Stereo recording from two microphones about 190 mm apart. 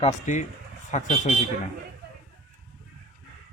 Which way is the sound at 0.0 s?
40° left (ahead or behind).